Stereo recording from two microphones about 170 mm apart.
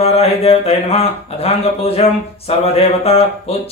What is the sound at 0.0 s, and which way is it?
Mantra, 35° left (ahead or behind).